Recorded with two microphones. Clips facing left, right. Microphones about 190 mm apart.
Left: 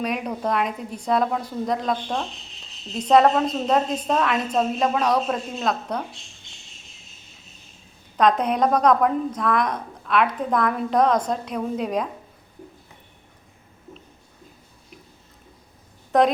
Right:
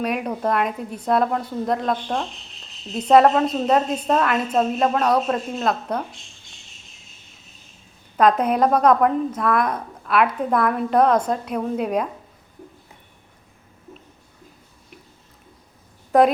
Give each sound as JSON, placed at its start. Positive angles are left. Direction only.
{"t": 0.0, "sound": "a woman's voice", "side_deg": -5}
{"t": 8.2, "sound": "a woman's voice", "side_deg": -5}